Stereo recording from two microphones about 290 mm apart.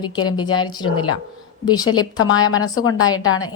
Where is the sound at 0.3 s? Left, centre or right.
Centre.